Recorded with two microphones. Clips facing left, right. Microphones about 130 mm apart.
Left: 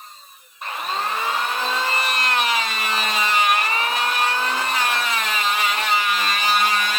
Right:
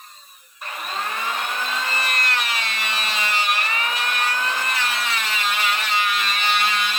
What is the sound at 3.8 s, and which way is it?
Vehicle, 30° left (ahead or behind).